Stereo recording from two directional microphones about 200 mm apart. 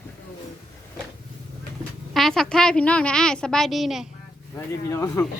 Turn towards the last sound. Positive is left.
turn(degrees=15)  # may be behind; listen again after turning